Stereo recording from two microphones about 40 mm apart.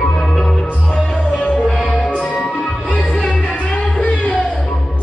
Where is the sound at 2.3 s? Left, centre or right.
Centre.